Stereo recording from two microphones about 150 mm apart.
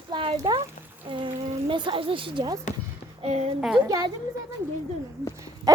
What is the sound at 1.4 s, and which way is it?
Speech, 45° right (ahead or behind).